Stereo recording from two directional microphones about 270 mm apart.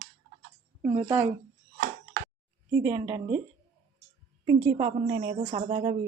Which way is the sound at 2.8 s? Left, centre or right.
Centre.